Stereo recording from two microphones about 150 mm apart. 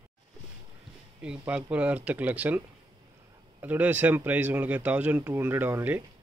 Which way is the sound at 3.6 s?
10° right (ahead or behind).